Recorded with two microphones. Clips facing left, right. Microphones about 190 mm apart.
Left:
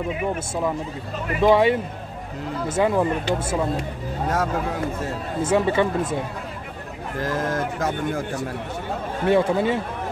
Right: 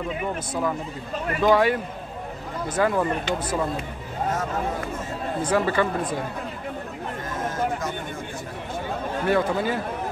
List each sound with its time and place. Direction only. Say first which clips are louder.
1.4 s speech: left 3 dB; 25° left (ahead or behind)
5.4 s speech: left 3 dB; 25° left (ahead or behind)
7.2 s speech: left 5 dB; 80° left; by 8.2 s 65° left (ahead or behind)
9.3 s speech: left 4 dB; 25° left (ahead or behind)